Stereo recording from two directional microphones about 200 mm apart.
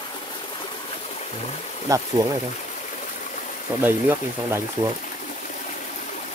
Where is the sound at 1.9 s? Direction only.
15° right (ahead or behind).